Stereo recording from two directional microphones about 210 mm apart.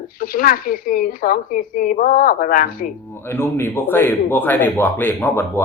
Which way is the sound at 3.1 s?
10° left (ahead or behind).